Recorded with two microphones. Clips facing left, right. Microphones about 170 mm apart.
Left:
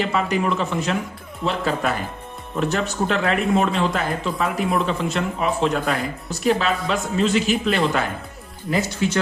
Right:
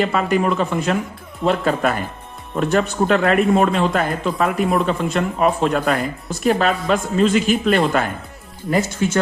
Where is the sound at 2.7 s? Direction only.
50° right (ahead or behind).